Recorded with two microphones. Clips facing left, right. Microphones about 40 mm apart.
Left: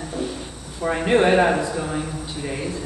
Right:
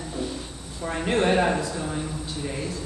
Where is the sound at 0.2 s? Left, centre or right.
Centre.